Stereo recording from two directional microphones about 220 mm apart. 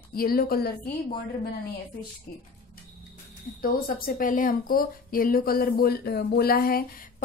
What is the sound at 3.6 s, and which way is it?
Speech, 40° left (ahead or behind).